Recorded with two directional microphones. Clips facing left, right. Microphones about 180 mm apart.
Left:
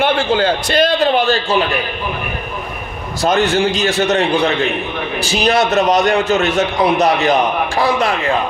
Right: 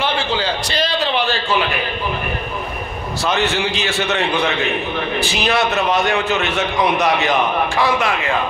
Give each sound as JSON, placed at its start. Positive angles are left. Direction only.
{"t": 0.0, "sound": "a man's voice", "side_deg": 55}
{"t": 3.2, "sound": "a man's voice", "side_deg": 45}
{"t": 5.4, "sound": "a man's voice", "side_deg": 40}